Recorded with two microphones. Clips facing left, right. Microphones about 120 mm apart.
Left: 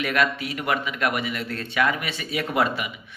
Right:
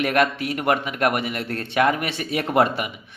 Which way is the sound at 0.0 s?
50° right (ahead or behind).